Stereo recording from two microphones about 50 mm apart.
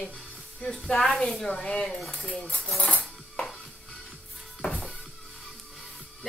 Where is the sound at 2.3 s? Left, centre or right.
Left.